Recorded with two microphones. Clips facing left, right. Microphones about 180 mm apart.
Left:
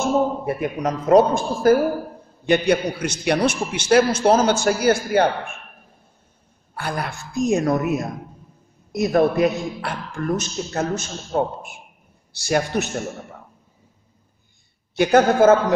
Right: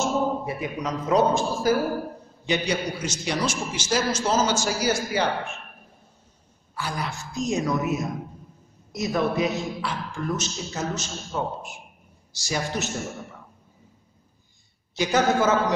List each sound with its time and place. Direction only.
0.0 s a man's voice: 55° left (ahead or behind)
6.7 s a man's voice: 55° left (ahead or behind)
15.0 s a man's voice: 55° left (ahead or behind)